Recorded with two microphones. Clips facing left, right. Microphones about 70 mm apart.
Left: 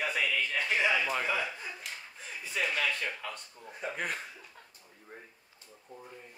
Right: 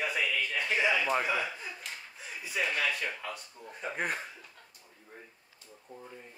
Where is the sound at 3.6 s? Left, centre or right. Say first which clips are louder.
Even; centre.